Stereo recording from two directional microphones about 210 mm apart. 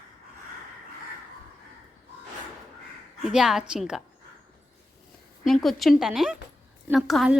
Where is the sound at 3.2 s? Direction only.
5° right (ahead or behind).